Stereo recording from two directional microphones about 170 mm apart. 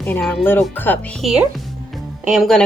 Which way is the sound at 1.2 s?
Centre (ahead or behind).